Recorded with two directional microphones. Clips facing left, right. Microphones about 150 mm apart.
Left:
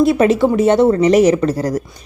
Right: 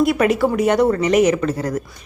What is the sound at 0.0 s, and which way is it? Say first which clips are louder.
Speech: left 4 dB; 25° left (ahead or behind).